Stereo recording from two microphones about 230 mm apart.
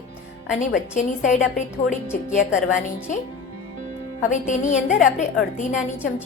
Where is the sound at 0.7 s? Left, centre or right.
Left.